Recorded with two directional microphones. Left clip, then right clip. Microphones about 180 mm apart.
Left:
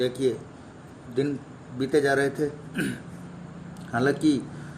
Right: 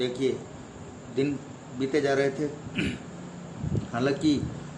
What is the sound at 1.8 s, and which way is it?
A man's voice, 50° left (ahead or behind).